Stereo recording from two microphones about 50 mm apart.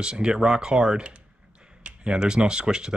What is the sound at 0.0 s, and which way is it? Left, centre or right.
Speech, centre.